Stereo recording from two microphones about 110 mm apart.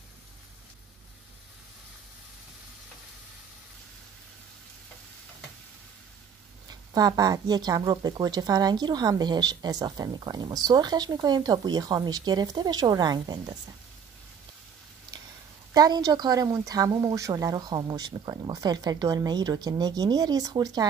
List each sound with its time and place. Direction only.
6.7 s speech: 35° right (ahead or behind)
15.7 s speech: 35° right (ahead or behind)